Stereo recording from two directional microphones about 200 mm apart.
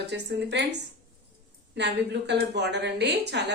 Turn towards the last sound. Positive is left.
turn(degrees=-60)  # may be behind; listen again after turning